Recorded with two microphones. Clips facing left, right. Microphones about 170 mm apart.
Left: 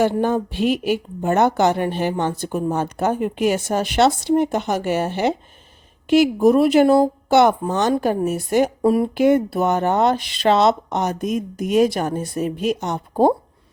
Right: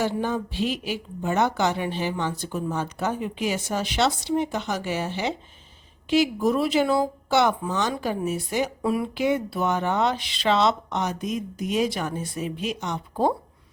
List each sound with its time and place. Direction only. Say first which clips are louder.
0.0 s speech: left 7 dB; 55° left (ahead or behind)